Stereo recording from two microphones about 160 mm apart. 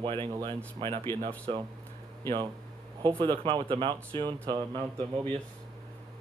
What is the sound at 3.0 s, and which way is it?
Speech, 30° right (ahead or behind).